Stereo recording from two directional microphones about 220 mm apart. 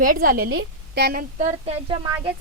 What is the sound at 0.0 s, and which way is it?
A woman's voice, 40° right (ahead or behind).